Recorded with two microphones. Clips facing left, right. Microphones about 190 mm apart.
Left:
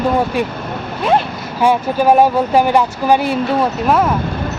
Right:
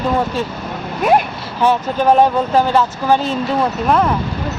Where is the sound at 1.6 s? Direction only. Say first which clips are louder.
Left 1 dB; 10° left (ahead or behind).